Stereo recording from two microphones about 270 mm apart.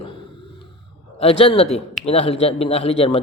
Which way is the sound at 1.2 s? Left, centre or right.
Left.